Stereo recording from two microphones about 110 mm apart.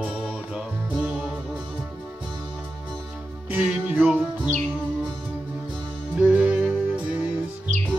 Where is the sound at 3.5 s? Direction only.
10° right (ahead or behind).